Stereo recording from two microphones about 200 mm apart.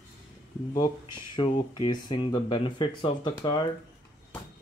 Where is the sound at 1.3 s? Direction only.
25° left (ahead or behind).